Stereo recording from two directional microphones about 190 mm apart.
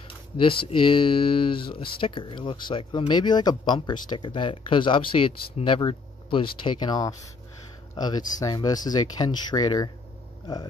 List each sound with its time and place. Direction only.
0.4 s speech: 25° left (ahead or behind)